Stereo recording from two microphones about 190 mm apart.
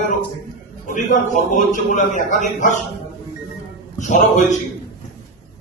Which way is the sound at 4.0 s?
40° left (ahead or behind).